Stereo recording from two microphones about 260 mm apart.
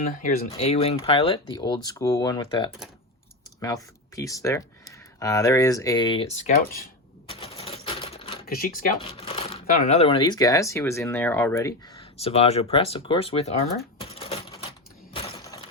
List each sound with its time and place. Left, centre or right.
0.0 s speech: left
7.3 s typewriter: left
8.4 s speech: left
9.0 s speech: left
12.2 s speech: left
14.1 s typewriter: left
15.1 s a sound: left